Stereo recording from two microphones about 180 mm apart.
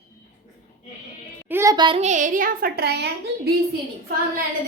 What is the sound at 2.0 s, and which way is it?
A woman's voice, 45° right (ahead or behind).